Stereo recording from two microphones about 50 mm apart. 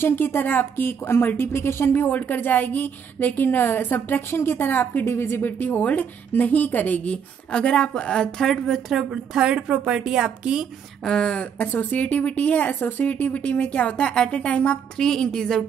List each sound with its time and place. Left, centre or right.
0.0 s speech: left
5.6 s speech: left; by 8.9 s centre
8.9 s a woman's voice: centre
11.1 s speech: centre
11.8 s speech: left
15.0 s a woman's voice: centre